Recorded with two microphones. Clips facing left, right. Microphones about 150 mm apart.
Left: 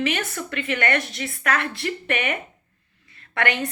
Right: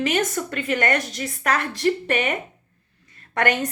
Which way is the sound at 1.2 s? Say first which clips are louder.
Right 1 dB; 40° right (ahead or behind).